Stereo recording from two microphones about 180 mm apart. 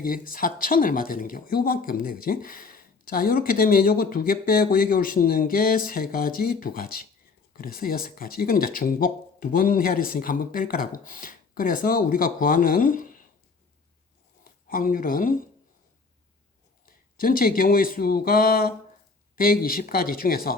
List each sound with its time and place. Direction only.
0.0 s speech: 50° left (ahead or behind)
14.4 s speech: 50° left (ahead or behind)
16.8 s speech: 50° left (ahead or behind)